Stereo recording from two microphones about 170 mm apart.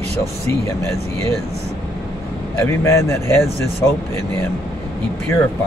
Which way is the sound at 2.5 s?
15° left (ahead or behind).